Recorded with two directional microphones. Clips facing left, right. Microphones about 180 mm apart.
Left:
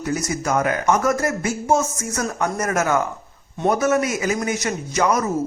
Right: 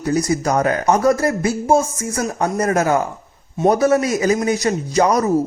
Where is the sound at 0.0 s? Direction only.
35° right (ahead or behind).